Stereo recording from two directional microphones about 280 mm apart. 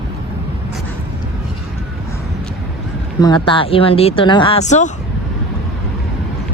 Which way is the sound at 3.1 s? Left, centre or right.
Centre.